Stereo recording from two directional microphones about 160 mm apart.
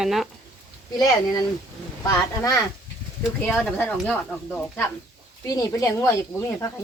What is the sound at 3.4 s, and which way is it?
Speech, 10° left (ahead or behind).